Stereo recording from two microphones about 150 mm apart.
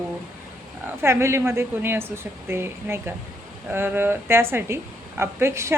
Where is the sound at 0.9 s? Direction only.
15° right (ahead or behind).